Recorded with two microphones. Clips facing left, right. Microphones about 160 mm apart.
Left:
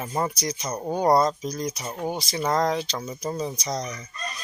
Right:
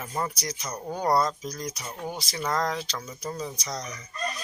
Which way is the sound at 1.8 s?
35° left (ahead or behind).